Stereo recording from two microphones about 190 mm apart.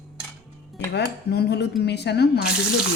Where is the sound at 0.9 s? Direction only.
60° left (ahead or behind).